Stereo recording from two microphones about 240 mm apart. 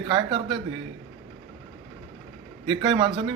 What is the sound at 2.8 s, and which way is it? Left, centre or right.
Speech, centre.